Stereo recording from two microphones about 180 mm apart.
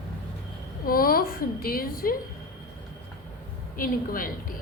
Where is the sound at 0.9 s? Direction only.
55° left (ahead or behind).